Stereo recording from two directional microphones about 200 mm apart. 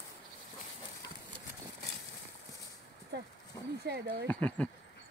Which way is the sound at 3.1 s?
55° right (ahead or behind).